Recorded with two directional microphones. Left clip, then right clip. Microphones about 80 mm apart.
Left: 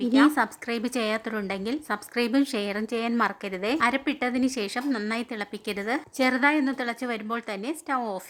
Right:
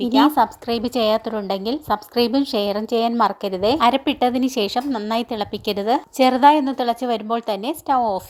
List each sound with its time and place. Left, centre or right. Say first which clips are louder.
0.2 s a woman's voice: right 7 dB; right
3.8 s a woman's voice: right 6 dB; right